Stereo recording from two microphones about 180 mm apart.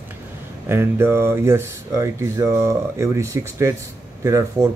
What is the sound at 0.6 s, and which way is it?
Speech, 10° right (ahead or behind).